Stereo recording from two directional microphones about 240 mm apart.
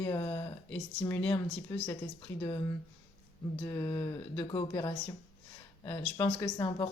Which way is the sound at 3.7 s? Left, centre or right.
Centre.